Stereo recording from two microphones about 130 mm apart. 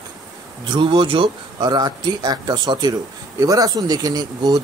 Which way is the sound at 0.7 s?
40° right (ahead or behind).